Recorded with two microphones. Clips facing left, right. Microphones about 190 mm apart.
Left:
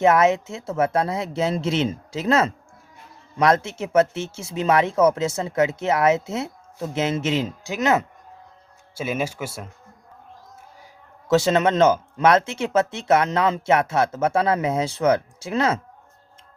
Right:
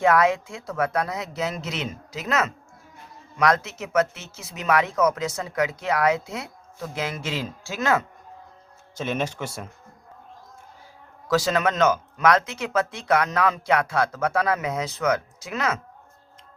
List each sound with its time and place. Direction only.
0.0 s speech: 25° left (ahead or behind)
9.0 s speech: 10° left (ahead or behind)
11.3 s speech: 25° left (ahead or behind)